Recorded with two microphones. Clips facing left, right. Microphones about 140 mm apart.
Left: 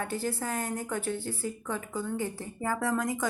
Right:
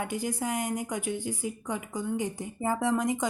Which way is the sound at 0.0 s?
15° right (ahead or behind).